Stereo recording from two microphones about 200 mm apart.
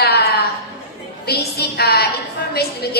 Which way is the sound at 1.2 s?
55° left (ahead or behind).